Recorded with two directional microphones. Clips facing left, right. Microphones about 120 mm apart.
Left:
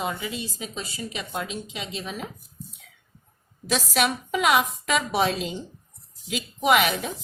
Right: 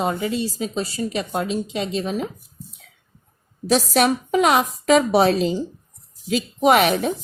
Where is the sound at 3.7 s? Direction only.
35° right (ahead or behind).